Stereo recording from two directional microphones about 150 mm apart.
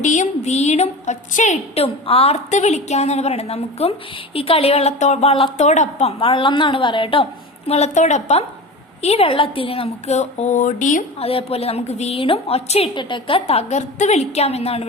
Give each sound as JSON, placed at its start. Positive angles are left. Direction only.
{"t": 0.0, "sound": "a woman's voice", "side_deg": 55}
{"t": 7.7, "sound": "a woman's voice", "side_deg": 50}
{"t": 11.2, "sound": "a woman's voice", "side_deg": 40}
{"t": 12.9, "sound": "a woman's voice", "side_deg": 30}